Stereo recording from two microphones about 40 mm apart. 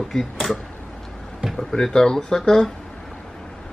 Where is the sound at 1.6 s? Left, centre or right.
Centre.